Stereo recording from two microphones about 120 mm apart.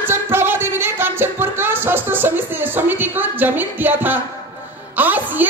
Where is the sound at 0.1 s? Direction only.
20° right (ahead or behind).